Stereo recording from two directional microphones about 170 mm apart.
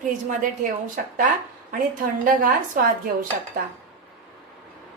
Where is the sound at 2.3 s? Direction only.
50° right (ahead or behind).